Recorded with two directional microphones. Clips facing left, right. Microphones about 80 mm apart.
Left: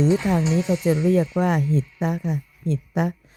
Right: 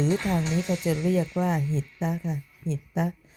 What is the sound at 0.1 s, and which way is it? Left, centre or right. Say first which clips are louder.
Speech: left 5 dB; centre.